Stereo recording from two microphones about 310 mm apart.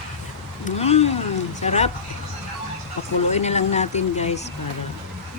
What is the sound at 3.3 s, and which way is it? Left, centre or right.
Speech, left.